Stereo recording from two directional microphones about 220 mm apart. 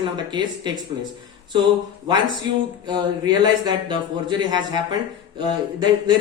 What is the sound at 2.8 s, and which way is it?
Speech, 20° right (ahead or behind).